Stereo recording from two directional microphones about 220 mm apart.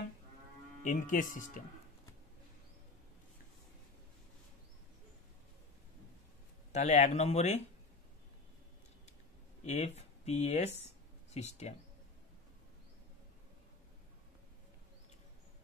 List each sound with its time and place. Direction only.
0.8 s speech: 35° left (ahead or behind)
6.7 s speech: 35° left (ahead or behind)
9.7 s speech: 30° left (ahead or behind)